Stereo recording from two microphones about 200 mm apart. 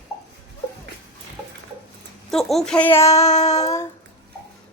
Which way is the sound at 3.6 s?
15° left (ahead or behind).